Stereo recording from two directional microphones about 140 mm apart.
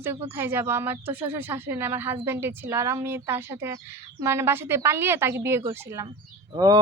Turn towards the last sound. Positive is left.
turn(degrees=-25)  # may be behind; listen again after turning